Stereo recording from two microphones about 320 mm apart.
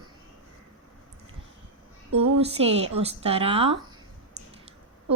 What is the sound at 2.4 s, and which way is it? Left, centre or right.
Speech, centre.